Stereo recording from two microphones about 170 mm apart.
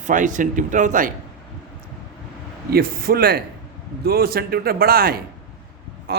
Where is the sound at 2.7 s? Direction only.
65° right (ahead or behind).